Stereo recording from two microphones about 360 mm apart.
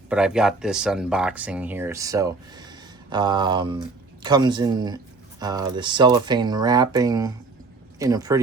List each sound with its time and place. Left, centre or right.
0.1 s speech: centre